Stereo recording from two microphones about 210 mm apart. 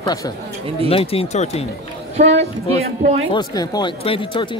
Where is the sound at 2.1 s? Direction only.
30° right (ahead or behind).